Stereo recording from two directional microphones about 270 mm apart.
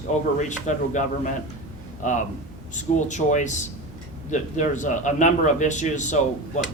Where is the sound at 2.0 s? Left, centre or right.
Left.